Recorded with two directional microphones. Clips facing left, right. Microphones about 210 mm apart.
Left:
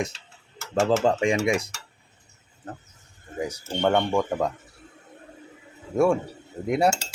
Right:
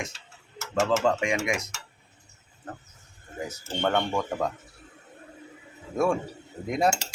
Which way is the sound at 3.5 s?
10° left (ahead or behind).